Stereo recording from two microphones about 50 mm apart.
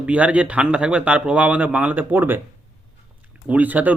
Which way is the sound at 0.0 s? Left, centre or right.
Right.